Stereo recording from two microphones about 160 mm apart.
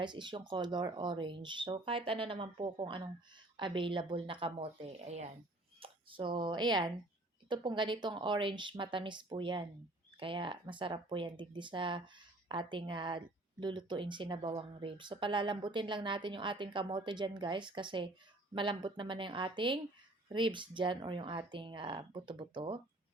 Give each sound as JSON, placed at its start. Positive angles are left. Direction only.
{"t": 0.0, "sound": "speech", "side_deg": -30}
{"t": 5.8, "sound": "speech", "side_deg": -30}